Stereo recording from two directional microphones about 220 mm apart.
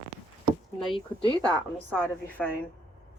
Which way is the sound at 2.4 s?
5° left (ahead or behind).